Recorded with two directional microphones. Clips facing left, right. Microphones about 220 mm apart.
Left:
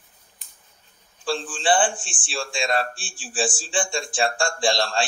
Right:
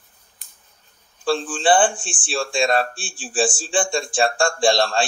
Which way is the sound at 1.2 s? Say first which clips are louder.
Right 5 dB; 55° right (ahead or behind).